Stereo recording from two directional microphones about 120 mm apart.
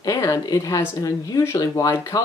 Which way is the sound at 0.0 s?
25° left (ahead or behind).